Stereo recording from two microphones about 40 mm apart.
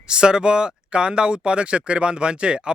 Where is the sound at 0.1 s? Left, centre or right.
Right.